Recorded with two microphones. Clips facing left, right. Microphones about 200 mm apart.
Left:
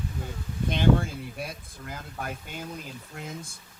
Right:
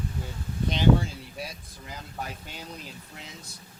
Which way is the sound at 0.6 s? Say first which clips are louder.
Even; 55° left (ahead or behind).